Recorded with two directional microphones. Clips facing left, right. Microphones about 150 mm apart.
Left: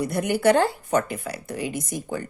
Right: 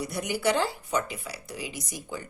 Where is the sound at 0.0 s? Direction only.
55° left (ahead or behind).